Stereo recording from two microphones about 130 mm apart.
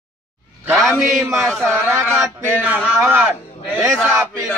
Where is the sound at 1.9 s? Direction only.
15° right (ahead or behind).